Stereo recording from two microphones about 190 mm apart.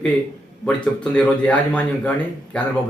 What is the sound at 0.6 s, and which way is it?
Speech, 5° left (ahead or behind).